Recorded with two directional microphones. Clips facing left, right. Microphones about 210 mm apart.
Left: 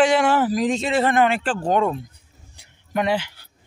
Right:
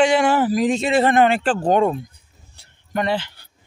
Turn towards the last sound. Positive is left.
turn(degrees=5)  # may be behind; listen again after turning